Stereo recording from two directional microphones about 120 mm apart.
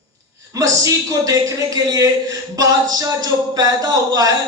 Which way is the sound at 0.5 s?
30° right (ahead or behind).